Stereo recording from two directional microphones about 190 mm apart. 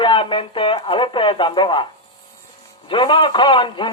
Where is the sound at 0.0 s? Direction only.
25° left (ahead or behind).